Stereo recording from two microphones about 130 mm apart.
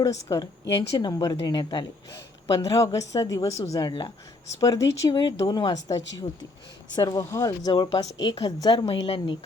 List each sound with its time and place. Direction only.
0.0 s a woman's voice: 25° left (ahead or behind)
9.0 s a woman's voice: 40° left (ahead or behind)